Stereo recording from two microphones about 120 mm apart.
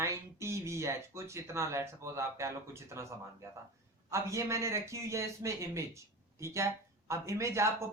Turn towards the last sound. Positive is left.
turn(degrees=-25)  # may be behind; listen again after turning